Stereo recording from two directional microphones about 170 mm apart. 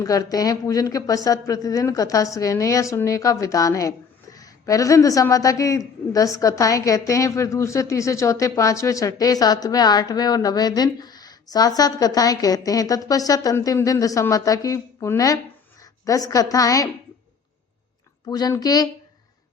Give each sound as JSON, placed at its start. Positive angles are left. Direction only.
{"t": 0.0, "sound": "a woman's voice", "side_deg": 20}
{"t": 18.3, "sound": "a woman's voice", "side_deg": 20}